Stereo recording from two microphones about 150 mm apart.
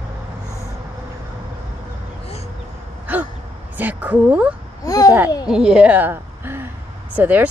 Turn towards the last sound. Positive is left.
turn(degrees=-10)  # may be behind; listen again after turning